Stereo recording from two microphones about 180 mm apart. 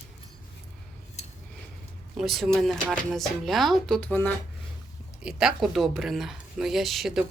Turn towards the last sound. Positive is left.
turn(degrees=0)  # may be behind; listen again after turning